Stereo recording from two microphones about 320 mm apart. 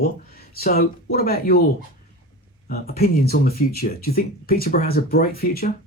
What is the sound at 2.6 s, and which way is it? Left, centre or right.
Speech, left.